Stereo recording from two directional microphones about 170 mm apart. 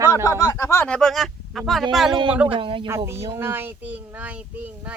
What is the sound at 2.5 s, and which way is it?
Speech, 30° right (ahead or behind).